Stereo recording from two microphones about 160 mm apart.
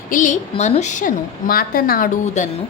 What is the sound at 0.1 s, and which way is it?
A woman's voice, 50° left (ahead or behind).